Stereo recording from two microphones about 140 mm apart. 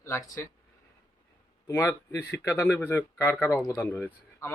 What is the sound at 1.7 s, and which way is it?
Speech, 15° left (ahead or behind).